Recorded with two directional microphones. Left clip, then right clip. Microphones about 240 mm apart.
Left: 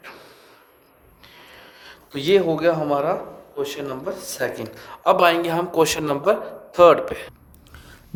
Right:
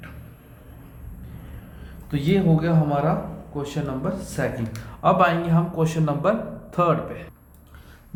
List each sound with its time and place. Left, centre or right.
1.8 s speech: left